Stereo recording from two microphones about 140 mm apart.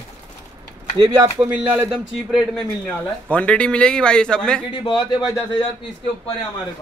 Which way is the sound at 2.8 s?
10° left (ahead or behind).